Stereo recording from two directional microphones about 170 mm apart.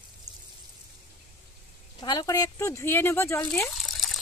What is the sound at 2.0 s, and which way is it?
Speech, 25° left (ahead or behind).